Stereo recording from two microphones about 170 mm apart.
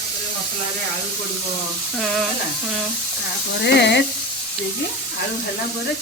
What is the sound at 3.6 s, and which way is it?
Sizzle, 85° left.